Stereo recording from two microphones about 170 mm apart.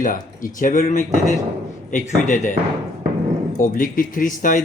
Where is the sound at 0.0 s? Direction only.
55° left (ahead or behind).